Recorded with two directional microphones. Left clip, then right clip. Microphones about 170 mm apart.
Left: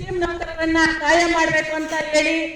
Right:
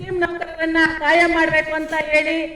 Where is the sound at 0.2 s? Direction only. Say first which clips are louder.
Right 1 dB; 30° left (ahead or behind).